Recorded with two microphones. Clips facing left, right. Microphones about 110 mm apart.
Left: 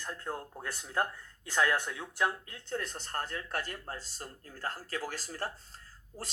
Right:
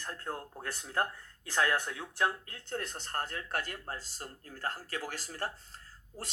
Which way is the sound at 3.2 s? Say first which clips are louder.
Even; 35° left (ahead or behind).